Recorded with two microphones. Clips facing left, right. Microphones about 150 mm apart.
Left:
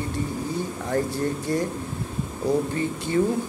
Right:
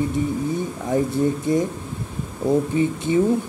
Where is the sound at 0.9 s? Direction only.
15° right (ahead or behind).